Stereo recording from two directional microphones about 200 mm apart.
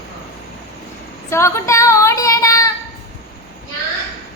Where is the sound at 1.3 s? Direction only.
15° left (ahead or behind).